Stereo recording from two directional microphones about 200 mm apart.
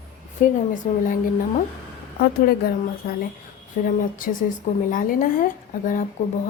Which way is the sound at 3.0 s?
45° left (ahead or behind).